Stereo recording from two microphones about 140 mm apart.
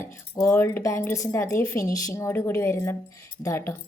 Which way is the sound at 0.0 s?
20° left (ahead or behind).